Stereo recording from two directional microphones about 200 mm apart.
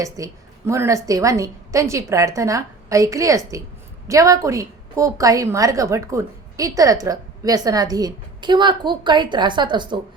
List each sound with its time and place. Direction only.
0.0 s a woman's voice: 15° right (ahead or behind)